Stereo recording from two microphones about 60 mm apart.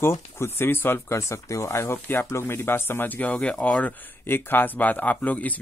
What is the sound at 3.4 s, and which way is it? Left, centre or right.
Speech, centre.